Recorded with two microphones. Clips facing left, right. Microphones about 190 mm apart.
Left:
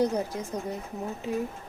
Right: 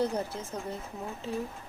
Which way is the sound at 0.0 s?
15° left (ahead or behind).